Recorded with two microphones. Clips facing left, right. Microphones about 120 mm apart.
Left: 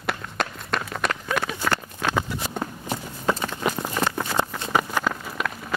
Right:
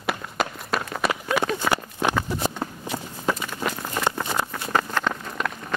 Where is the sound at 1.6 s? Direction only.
15° right (ahead or behind).